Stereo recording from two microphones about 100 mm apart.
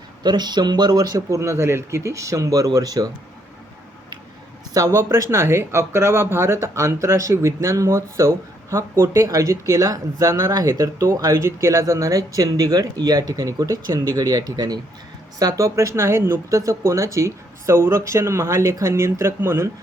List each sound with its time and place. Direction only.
0.2 s speech: 45° right (ahead or behind)
1.4 s speech: 30° right (ahead or behind)
4.7 s speech: 30° right (ahead or behind)